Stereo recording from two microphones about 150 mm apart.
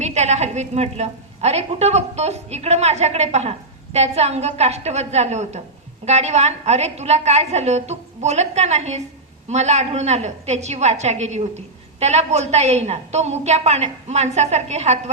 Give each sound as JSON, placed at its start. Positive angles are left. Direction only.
{"t": 0.0, "sound": "a woman's voice", "side_deg": -50}